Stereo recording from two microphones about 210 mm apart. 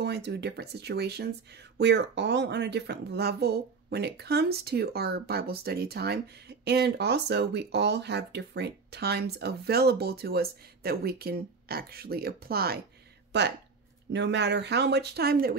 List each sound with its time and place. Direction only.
0.0 s speech: 50° right (ahead or behind)